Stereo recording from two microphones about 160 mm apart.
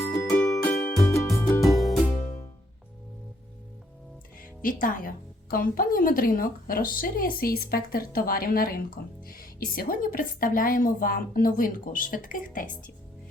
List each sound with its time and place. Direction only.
0.0 s music: 15° left (ahead or behind)
1.6 s music: centre (ahead or behind)
4.4 s speech: 60° left (ahead or behind)